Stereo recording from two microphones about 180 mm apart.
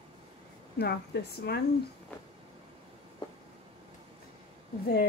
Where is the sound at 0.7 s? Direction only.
65° left (ahead or behind).